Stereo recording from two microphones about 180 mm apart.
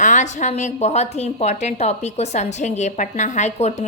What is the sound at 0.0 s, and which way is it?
A woman's voice, 45° left (ahead or behind).